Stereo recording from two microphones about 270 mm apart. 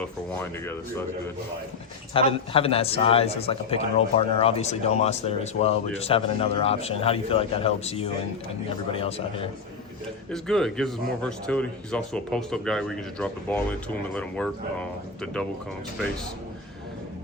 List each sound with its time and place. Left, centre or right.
2.1 s a man's voice: centre
10.3 s speech: centre